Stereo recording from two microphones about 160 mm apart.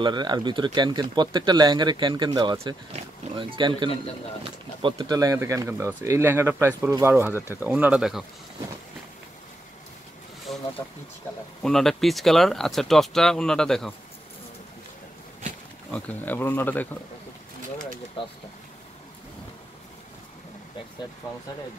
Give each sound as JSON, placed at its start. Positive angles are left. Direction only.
{"t": 0.0, "sound": "speech", "side_deg": -30}
{"t": 11.6, "sound": "speech", "side_deg": 0}
{"t": 15.9, "sound": "speech", "side_deg": 10}